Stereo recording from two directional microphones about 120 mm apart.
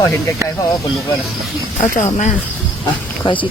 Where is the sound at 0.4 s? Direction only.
25° right (ahead or behind).